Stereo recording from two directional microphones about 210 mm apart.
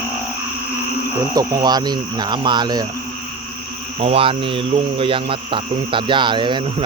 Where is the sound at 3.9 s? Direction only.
30° right (ahead or behind).